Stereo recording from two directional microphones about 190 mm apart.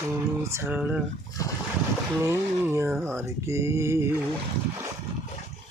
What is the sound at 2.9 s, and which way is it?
Speech, centre (ahead or behind).